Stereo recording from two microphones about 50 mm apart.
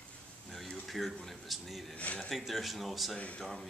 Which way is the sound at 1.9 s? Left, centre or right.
Left.